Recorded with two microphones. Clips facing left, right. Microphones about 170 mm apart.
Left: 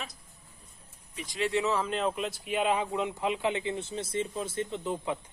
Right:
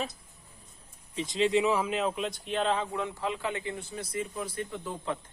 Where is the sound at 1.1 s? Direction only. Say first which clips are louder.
Right 4 dB; 25° right (ahead or behind); by 5.2 s 15° left (ahead or behind).